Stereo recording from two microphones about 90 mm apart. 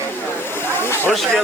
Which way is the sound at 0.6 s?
25° left (ahead or behind).